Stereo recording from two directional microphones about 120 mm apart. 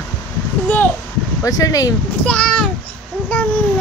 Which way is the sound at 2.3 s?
10° left (ahead or behind).